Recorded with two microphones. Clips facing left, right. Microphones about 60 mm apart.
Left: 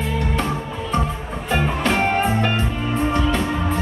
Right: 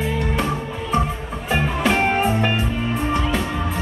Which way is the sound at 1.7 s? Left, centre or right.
Centre.